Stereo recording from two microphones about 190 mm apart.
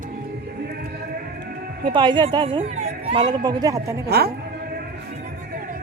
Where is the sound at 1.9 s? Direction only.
25° right (ahead or behind).